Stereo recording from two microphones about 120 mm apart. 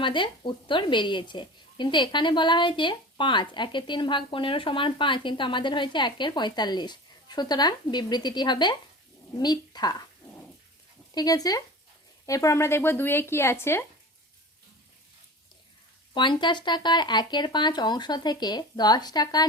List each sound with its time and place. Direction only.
0.0 s a woman's voice: 40° left (ahead or behind)
11.1 s a woman's voice: 30° left (ahead or behind)
16.1 s a woman's voice: 40° left (ahead or behind)